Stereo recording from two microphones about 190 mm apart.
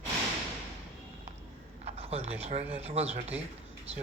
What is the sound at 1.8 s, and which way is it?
Speech, 30° right (ahead or behind).